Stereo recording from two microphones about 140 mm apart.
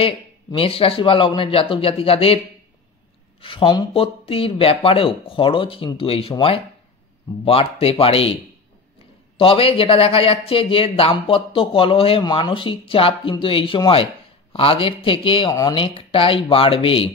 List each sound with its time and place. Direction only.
0.0 s speech: 40° left (ahead or behind)
9.4 s speech: 40° left (ahead or behind)